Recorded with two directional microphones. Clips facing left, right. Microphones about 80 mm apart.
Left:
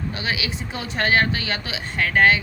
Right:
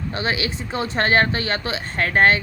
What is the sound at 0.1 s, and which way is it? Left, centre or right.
A woman's voice, right.